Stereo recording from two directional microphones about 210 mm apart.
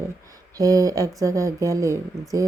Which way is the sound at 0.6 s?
15° right (ahead or behind).